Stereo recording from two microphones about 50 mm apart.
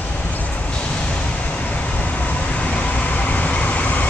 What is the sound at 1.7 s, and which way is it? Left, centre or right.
Vehicle, left.